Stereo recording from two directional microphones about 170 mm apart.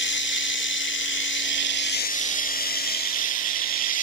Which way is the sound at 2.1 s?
50° left (ahead or behind).